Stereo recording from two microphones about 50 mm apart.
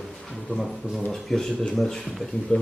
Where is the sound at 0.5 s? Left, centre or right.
Left.